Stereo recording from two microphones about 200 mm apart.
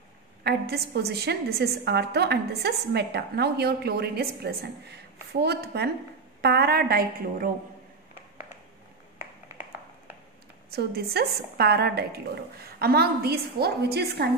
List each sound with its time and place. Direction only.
0.4 s a woman's voice: 55° right (ahead or behind)
10.7 s a woman's voice: 50° right (ahead or behind)